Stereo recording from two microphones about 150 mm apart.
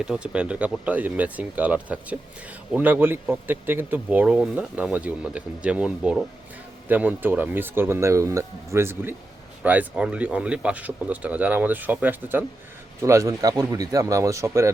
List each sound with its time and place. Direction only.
0.0 s speech: 5° right (ahead or behind)